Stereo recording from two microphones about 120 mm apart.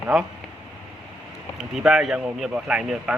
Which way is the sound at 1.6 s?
5° right (ahead or behind).